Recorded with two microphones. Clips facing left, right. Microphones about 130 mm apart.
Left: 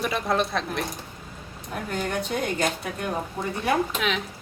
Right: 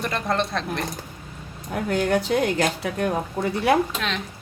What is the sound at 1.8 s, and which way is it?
A woman's voice, 90° right.